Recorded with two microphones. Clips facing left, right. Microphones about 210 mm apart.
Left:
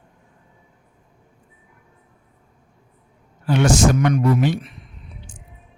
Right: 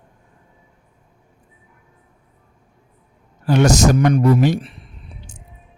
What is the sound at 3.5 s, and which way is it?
Speech, 40° right (ahead or behind).